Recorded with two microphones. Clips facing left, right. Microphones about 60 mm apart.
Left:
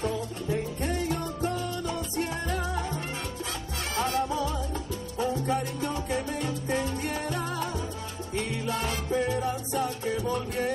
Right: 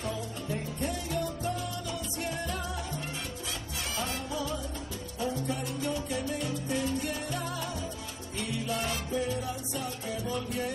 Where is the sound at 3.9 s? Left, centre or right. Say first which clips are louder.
Left 8 dB; left.